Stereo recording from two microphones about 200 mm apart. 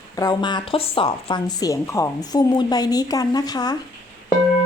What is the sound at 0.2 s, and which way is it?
A woman's voice, 20° left (ahead or behind).